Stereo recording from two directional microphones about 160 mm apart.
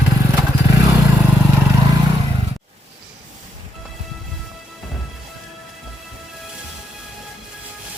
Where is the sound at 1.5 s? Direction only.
20° right (ahead or behind).